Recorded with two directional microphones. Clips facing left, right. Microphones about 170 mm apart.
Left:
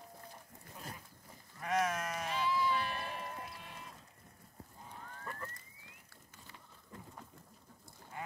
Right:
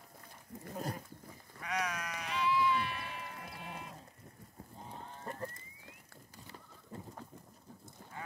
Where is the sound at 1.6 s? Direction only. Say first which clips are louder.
Left 4 dB; 45° left (ahead or behind).